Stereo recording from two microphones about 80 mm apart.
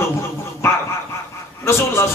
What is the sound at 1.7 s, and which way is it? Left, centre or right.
Speech, left.